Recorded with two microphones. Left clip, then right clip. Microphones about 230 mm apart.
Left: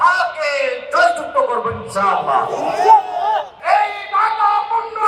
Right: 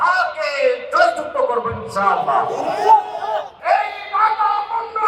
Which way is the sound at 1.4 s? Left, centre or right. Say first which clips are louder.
Left 2 dB; left.